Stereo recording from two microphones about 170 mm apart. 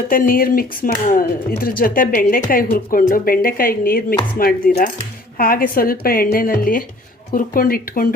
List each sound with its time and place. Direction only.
0.1 s speech: 55° left (ahead or behind)